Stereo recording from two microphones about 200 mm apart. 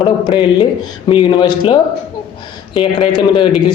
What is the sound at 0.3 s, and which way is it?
A man's voice, 25° left (ahead or behind).